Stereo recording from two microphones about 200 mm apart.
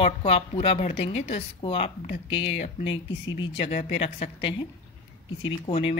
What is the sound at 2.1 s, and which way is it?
Speech, 70° left (ahead or behind).